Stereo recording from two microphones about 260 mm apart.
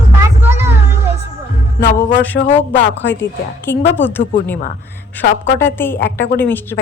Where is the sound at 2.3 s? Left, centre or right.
Left.